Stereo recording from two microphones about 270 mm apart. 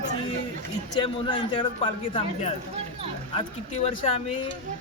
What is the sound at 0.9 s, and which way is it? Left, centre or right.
Speech, centre.